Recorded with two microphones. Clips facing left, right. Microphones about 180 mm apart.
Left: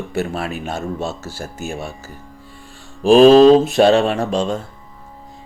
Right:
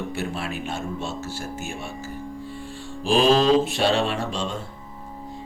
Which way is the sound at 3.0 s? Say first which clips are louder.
Left 11 dB; 45° left (ahead or behind).